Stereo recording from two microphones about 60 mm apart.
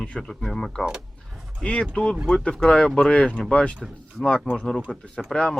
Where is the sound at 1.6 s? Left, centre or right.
Centre.